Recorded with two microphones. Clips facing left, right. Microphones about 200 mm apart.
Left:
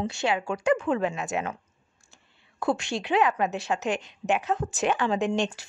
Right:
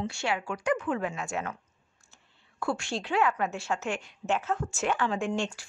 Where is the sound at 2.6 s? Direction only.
20° left (ahead or behind).